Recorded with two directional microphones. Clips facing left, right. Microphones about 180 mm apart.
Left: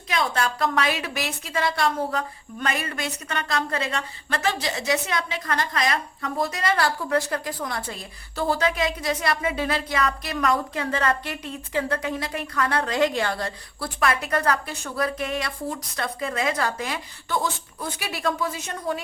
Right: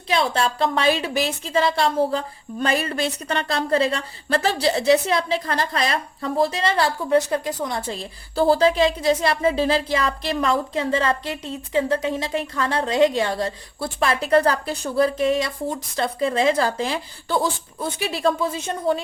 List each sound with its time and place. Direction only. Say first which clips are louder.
0.1 s a woman's voice: right 4 dB; 30° right (ahead or behind)